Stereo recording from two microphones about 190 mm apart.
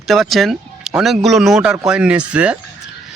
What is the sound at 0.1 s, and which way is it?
Speech, centre (ahead or behind).